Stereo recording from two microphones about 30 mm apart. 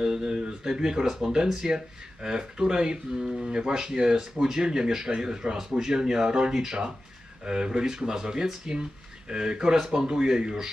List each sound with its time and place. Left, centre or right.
0.0 s speech: right
1.0 s speech: centre
1.3 s speech: right